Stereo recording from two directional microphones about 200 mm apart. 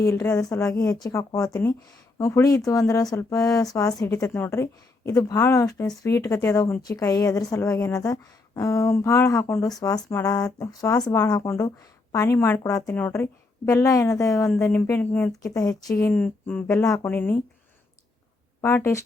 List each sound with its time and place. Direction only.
0.0 s a woman's voice: 15° left (ahead or behind)
18.6 s a woman's voice: 15° left (ahead or behind)